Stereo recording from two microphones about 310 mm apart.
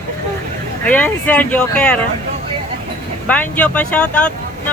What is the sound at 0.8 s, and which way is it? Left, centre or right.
Speech, centre.